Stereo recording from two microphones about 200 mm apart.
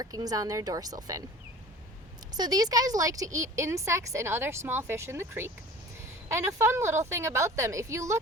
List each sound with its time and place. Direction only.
0.0 s a woman's voice: 20° right (ahead or behind)
2.3 s a woman's voice: 20° right (ahead or behind)